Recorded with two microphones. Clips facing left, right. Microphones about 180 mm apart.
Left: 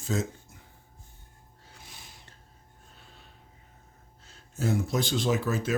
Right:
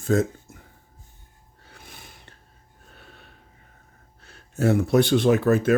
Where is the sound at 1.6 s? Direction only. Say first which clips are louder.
Right 5 dB; 60° right (ahead or behind).